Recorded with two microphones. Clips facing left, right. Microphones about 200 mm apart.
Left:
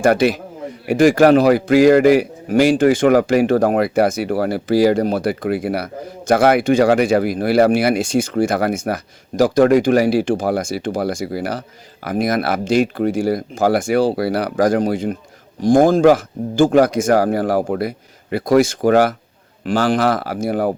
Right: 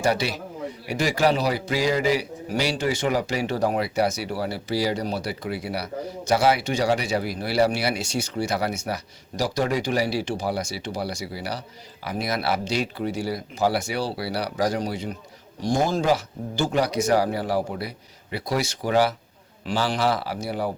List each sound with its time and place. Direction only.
0.0 s a man's voice: 50° left (ahead or behind)